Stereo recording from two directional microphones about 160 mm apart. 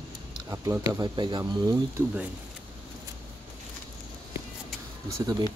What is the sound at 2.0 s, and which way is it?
Speech, 15° right (ahead or behind).